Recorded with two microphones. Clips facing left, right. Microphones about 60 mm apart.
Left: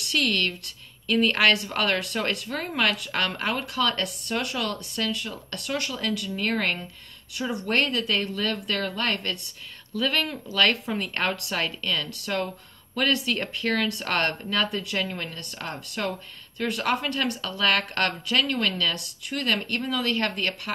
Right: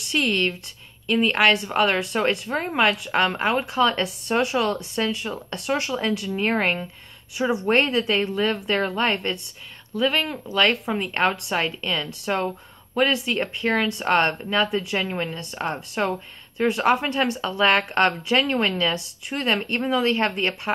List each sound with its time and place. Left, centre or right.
0.1 s a woman's voice: centre
2.5 s a woman's voice: right
13.1 s speech: centre
15.0 s a woman's voice: right